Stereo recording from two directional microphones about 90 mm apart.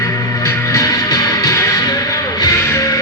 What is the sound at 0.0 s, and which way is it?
Music, 30° left (ahead or behind).